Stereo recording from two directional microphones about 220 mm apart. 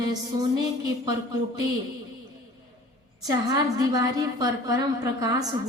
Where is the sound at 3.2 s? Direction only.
15° right (ahead or behind).